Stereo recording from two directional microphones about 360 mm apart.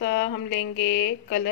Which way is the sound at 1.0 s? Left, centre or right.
Left.